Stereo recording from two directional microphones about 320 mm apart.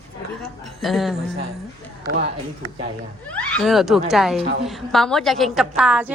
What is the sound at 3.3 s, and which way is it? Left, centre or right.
Speech, centre.